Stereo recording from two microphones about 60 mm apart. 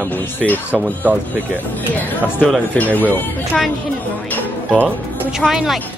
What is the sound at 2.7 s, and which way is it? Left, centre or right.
Speech, left.